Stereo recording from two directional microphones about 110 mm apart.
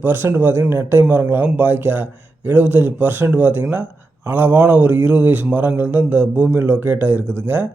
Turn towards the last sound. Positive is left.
turn(degrees=-20)  # may be behind; listen again after turning